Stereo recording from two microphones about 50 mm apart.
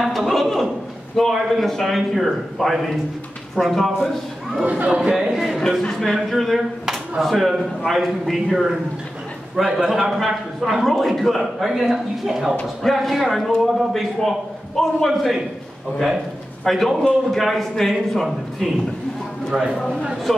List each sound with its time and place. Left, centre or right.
0.1 s a sound: centre
1.1 s speech: centre
4.6 s a man's voice: right
5.1 s speech: centre
5.6 s a man's voice: centre
16.6 s speech: centre
20.3 s speech: centre